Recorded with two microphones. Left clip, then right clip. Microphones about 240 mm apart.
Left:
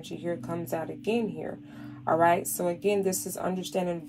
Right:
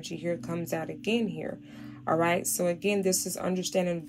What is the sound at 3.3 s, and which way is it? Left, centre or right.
Speech, right.